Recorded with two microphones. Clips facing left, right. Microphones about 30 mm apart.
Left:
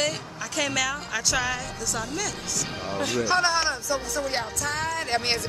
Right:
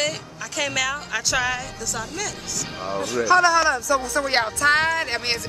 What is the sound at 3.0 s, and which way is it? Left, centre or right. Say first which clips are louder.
Speech: right 1 dB; left.